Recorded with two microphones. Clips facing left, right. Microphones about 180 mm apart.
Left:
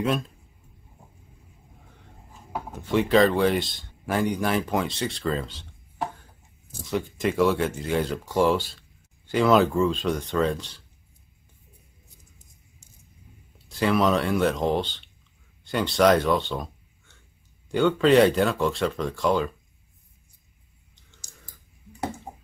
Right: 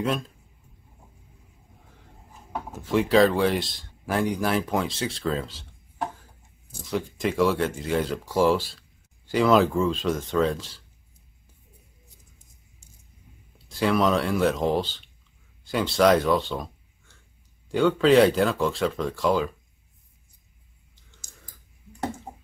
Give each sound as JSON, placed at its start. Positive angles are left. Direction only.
{"t": 2.0, "sound": "speech", "side_deg": 0}
{"t": 13.7, "sound": "speech", "side_deg": 0}